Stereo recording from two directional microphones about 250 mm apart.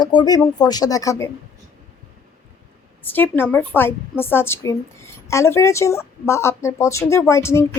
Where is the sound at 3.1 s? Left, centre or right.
Centre.